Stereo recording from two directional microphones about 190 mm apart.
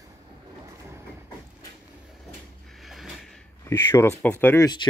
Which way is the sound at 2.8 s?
Centre (ahead or behind).